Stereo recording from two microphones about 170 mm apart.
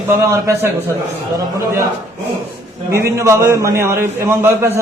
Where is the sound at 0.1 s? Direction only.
15° right (ahead or behind).